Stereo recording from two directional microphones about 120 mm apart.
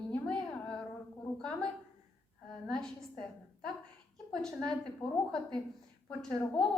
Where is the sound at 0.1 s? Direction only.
10° left (ahead or behind).